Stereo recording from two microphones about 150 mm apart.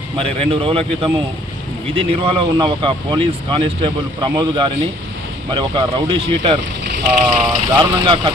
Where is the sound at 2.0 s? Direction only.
35° right (ahead or behind).